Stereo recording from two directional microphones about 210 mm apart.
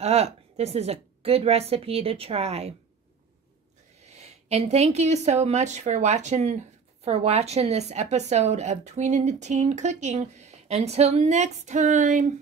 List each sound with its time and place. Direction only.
0.0 s a woman's voice: 30° right (ahead or behind)
4.0 s speech: 30° right (ahead or behind)